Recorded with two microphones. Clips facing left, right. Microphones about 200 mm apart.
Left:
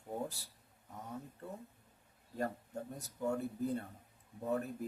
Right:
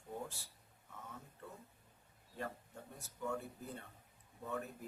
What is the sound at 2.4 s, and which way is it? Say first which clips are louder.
Speech: left 7 dB; 40° left (ahead or behind).